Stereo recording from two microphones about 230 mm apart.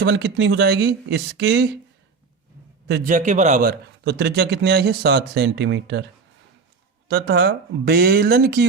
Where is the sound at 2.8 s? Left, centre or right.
Right.